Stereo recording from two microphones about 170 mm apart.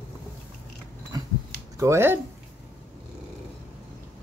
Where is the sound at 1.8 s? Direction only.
15° right (ahead or behind).